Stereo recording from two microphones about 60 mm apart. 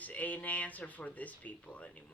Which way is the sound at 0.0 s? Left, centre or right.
Left.